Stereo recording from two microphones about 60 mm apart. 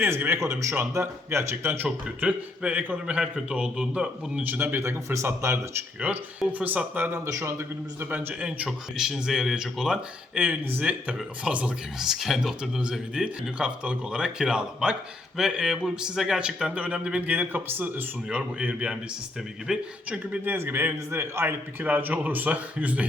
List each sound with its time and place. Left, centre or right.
0.0 s a man's voice: right
0.3 s speech: right
2.2 s a man's voice: right
4.4 s a man's voice: right
4.8 s speech: right
6.0 s a man's voice: right
7.3 s a man's voice: right
8.1 s a man's voice: right
9.0 s speech: centre
10.3 s a man's voice: right
11.9 s a man's voice: centre; by 18.0 s right
18.3 s a man's voice: right
20.1 s a man's voice: right
21.8 s a man's voice: right